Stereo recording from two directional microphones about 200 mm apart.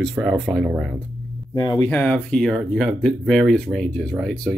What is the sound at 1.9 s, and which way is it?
Speech, 10° left (ahead or behind).